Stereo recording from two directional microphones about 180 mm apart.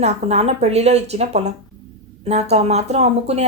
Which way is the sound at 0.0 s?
35° right (ahead or behind).